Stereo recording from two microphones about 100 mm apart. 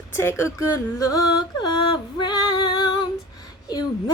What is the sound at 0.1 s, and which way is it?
Speech, 25° left (ahead or behind).